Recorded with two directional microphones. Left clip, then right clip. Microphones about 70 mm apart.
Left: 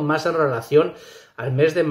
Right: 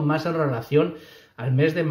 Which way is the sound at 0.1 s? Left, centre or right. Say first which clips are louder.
Left 5 dB; left.